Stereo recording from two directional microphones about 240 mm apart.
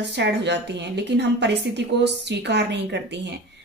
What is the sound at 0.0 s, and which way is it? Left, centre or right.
A woman's voice, right.